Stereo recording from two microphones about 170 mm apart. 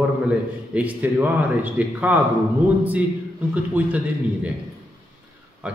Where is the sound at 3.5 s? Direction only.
10° right (ahead or behind).